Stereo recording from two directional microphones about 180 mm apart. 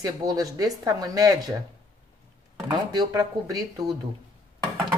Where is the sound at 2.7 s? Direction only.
25° right (ahead or behind).